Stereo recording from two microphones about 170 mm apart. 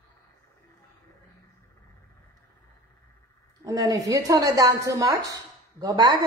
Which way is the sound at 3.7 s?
20° right (ahead or behind).